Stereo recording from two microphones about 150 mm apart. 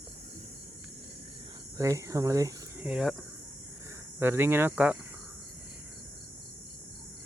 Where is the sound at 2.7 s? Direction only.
5° right (ahead or behind).